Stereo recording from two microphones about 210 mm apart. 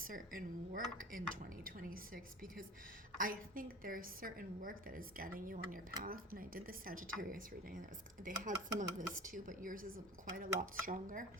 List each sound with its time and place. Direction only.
0.1 s speech: 40° right (ahead or behind)